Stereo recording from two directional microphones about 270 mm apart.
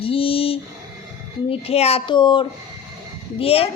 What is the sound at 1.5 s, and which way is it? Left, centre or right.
Speech, left.